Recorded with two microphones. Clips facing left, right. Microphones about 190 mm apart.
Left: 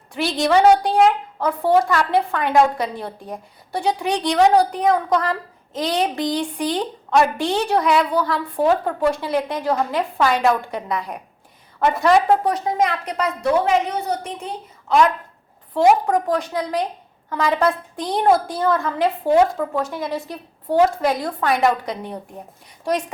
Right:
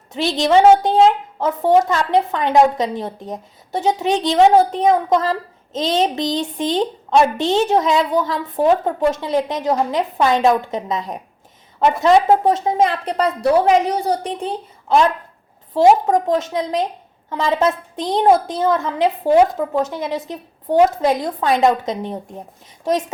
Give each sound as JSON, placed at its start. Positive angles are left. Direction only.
{"t": 0.1, "sound": "a woman's voice", "side_deg": -20}